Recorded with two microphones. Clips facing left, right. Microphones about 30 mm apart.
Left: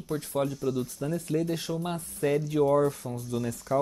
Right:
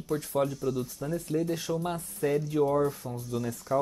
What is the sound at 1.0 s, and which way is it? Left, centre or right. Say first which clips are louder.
Speech: left 2 dB; left.